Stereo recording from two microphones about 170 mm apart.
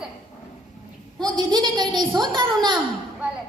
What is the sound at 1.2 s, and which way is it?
A woman's voice, 25° right (ahead or behind).